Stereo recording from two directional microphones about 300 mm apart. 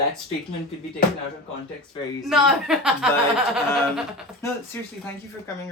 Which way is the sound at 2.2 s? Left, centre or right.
Centre.